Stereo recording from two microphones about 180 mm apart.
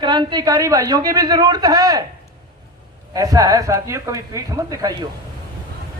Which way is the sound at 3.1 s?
20° right (ahead or behind).